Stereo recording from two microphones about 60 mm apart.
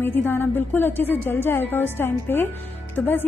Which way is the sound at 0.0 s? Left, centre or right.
Left.